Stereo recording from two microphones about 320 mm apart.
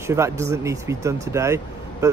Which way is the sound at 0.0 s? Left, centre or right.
Centre.